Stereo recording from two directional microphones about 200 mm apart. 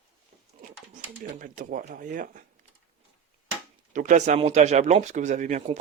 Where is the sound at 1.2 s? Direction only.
45° right (ahead or behind).